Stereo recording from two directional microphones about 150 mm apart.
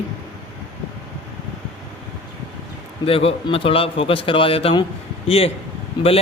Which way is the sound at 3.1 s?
40° left (ahead or behind).